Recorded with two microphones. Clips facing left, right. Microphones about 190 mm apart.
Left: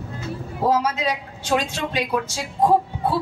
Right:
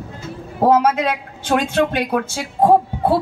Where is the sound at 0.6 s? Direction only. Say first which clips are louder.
Right 6 dB; 55° right (ahead or behind).